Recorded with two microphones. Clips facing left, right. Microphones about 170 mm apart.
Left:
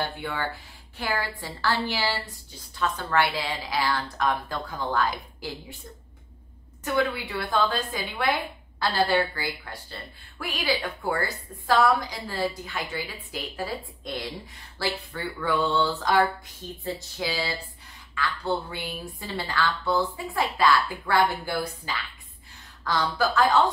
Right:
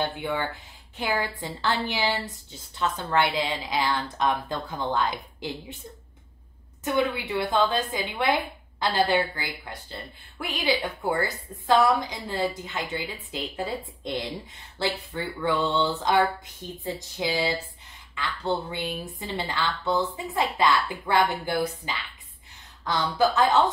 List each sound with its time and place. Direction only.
0.0 s a woman's voice: 20° right (ahead or behind)
6.8 s a woman's voice: 20° right (ahead or behind)